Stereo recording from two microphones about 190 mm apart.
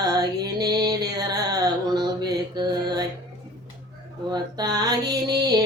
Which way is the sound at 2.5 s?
20° right (ahead or behind).